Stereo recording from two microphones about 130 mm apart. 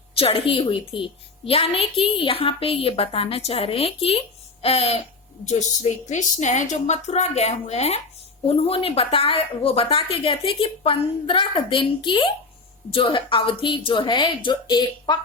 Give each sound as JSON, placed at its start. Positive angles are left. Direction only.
{"t": 0.2, "sound": "a woman's voice", "side_deg": 45}
{"t": 5.5, "sound": "a woman's voice", "side_deg": 65}